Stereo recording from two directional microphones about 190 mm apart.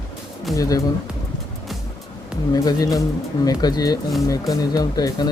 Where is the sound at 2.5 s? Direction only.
20° left (ahead or behind).